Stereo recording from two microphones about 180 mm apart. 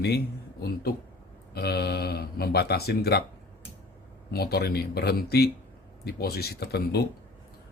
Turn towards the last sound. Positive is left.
turn(degrees=65)  # may be behind; listen again after turning